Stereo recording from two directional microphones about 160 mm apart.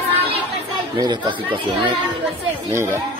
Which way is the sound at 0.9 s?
25° right (ahead or behind).